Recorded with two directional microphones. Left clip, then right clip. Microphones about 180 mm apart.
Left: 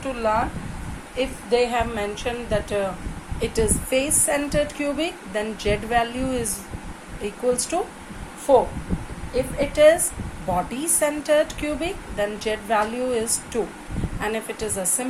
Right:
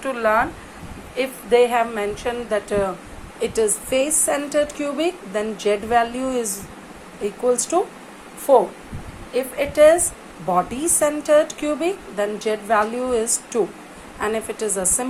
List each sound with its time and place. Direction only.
0.0 s a woman's voice: 25° right (ahead or behind)